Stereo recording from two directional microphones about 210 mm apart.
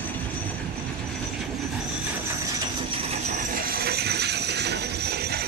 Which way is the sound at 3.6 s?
45° right (ahead or behind).